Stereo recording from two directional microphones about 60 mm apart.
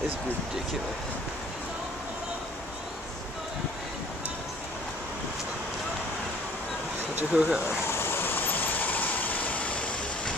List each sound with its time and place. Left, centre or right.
7.3 s speech: centre
8.0 s vehicle: left